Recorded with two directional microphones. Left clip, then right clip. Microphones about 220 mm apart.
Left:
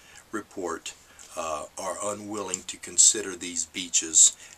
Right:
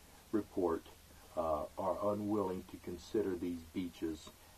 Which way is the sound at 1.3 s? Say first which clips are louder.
Left 4 dB; 35° left (ahead or behind).